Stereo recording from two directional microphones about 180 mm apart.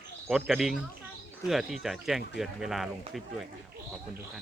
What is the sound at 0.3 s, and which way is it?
Speech, centre (ahead or behind).